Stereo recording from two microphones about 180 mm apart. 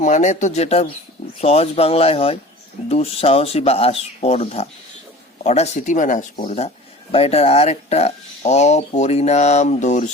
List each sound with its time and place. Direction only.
0.0 s speech: 40° left (ahead or behind)